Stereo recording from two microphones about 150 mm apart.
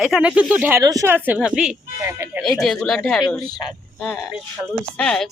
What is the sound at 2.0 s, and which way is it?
Speech, 20° right (ahead or behind).